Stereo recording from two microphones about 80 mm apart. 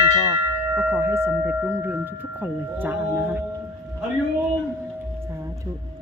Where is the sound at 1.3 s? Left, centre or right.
Centre.